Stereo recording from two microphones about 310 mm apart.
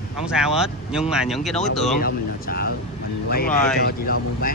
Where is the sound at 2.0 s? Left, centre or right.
Left.